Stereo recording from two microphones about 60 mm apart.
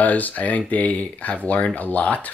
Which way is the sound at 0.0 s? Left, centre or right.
Left.